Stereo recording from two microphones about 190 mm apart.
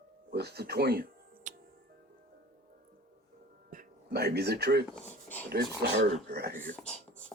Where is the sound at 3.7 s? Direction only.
50° right (ahead or behind).